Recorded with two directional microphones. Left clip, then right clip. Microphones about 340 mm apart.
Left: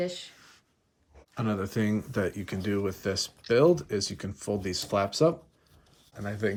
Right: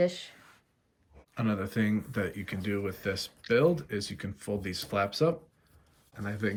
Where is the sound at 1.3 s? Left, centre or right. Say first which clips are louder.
Left 1 dB; centre.